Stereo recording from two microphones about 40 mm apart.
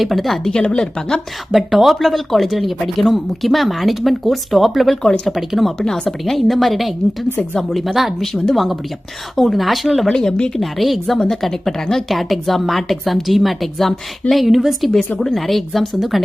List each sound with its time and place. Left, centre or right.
0.0 s a woman's voice: centre
0.5 s speech: left
1.5 s a woman's voice: centre
5.8 s a woman's voice: centre
8.2 s a woman's voice: centre
8.5 s a woman's voice: centre
10.1 s a woman's voice: centre
10.6 s a woman's voice: centre
11.0 s a woman's voice: centre